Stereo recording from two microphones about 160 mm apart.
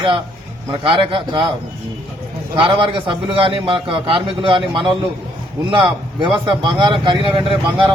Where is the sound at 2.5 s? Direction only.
30° right (ahead or behind).